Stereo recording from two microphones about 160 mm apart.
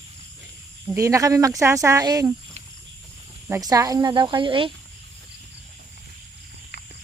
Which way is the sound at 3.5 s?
20° right (ahead or behind).